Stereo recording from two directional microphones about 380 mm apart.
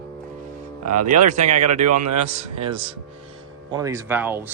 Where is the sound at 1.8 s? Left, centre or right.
Right.